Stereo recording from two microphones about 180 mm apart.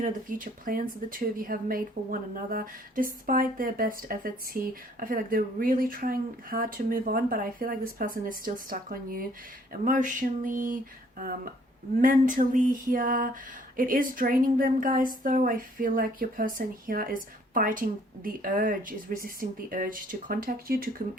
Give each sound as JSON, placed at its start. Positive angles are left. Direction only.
{"t": 0.0, "sound": "speech", "side_deg": -50}
{"t": 12.0, "sound": "speech", "side_deg": -50}